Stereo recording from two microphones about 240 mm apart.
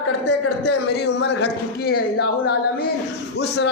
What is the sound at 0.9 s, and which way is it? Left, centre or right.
A woman's voice, left.